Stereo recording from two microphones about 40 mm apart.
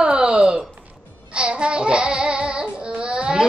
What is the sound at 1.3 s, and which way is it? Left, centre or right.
Child singing, right.